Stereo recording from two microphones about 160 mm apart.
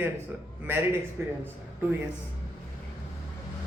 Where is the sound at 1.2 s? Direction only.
15° right (ahead or behind).